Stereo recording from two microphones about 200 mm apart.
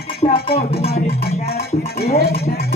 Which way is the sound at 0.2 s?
30° left (ahead or behind).